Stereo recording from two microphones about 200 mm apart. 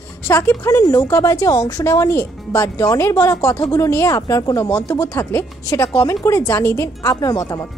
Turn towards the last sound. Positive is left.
turn(degrees=15)  # may be behind; listen again after turning